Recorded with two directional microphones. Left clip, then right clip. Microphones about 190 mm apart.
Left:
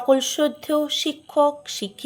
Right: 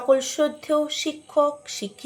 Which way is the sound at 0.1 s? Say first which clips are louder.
Left 1 dB; 30° left (ahead or behind).